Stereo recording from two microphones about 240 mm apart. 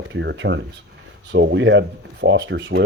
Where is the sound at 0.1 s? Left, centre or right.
Right.